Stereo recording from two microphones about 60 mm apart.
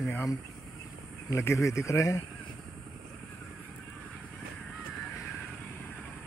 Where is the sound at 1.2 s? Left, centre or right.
Left.